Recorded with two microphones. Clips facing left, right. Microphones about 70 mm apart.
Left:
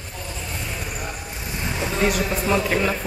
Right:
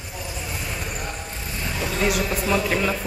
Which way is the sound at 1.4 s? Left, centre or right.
Centre.